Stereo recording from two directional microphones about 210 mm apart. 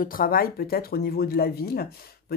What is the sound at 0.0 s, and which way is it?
Speech, 45° left (ahead or behind).